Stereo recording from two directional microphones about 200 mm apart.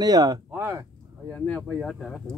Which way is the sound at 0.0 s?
20° right (ahead or behind).